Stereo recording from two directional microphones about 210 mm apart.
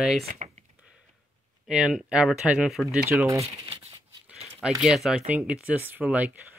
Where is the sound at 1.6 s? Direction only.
Centre (ahead or behind).